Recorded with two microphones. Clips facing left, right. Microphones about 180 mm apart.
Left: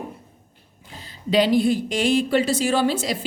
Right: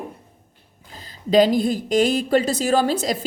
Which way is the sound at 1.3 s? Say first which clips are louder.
Right 2 dB; 45° right (ahead or behind).